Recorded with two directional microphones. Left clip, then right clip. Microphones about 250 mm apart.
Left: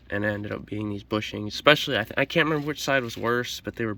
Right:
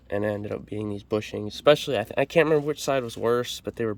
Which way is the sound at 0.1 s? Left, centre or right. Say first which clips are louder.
Right 1 dB; centre.